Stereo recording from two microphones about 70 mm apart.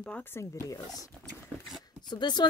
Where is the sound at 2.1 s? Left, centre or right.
Left.